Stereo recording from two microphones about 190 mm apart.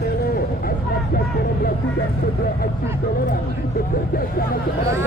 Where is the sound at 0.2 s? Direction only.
50° left (ahead or behind).